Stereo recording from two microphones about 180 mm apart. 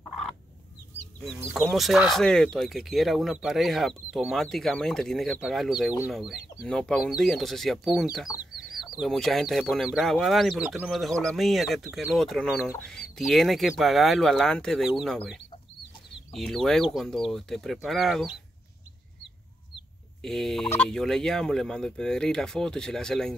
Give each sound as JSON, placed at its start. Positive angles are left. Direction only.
{"t": 1.2, "sound": "speech", "side_deg": 0}
{"t": 16.3, "sound": "speech", "side_deg": 0}
{"t": 20.2, "sound": "speech", "side_deg": 0}